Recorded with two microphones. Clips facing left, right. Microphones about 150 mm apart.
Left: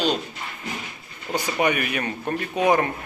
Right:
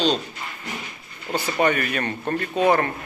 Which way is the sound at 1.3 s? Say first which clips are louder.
Right 1 dB; 15° left (ahead or behind).